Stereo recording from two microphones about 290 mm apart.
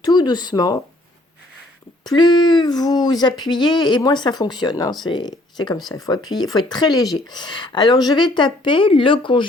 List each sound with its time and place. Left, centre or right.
0.0 s speech: centre
2.0 s speech: centre